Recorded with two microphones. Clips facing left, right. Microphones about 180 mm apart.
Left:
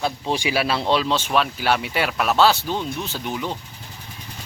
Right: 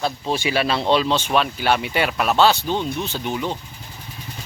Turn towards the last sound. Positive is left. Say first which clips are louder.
# right 2 dB
turn(degrees=0)  # may be behind; listen again after turning